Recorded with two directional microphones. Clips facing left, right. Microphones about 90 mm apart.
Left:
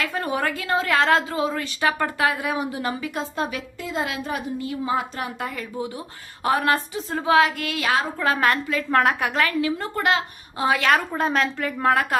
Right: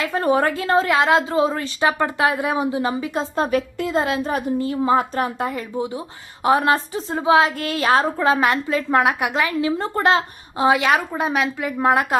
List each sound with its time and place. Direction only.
0.0 s a woman's voice: 30° right (ahead or behind)
0.9 s a woman's voice: 20° right (ahead or behind); by 5.3 s 45° right (ahead or behind)
5.4 s a woman's voice: 25° right (ahead or behind)
7.5 s a woman's voice: 35° right (ahead or behind)
8.2 s a woman's voice: 20° right (ahead or behind)